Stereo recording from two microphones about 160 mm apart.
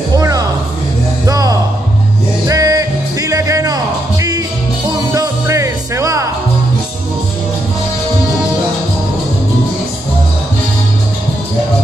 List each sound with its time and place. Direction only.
0.1 s music: 20° right (ahead or behind)